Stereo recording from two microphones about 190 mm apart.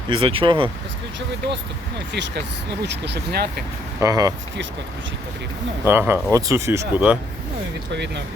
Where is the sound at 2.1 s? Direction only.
70° right (ahead or behind).